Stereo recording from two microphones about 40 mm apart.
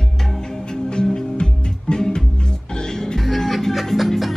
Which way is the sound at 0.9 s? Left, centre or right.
Left.